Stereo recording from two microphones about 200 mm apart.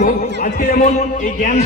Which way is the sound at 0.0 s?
40° left (ahead or behind).